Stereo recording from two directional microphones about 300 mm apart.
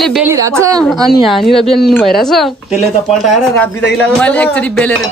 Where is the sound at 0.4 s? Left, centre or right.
Centre.